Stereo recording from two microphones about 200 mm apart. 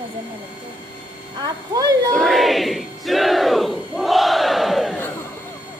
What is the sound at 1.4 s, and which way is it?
Speech, 20° right (ahead or behind).